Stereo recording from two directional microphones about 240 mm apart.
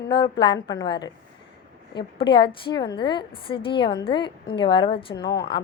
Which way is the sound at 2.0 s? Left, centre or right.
Centre.